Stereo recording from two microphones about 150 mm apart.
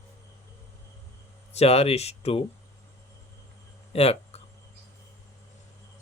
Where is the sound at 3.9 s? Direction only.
45° left (ahead or behind).